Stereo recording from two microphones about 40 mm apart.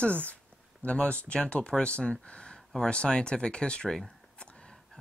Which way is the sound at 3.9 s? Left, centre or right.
Centre.